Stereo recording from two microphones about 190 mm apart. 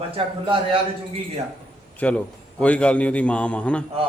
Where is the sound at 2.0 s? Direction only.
5° left (ahead or behind).